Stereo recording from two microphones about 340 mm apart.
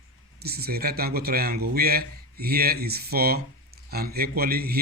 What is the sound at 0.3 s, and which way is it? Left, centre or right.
Speech, right.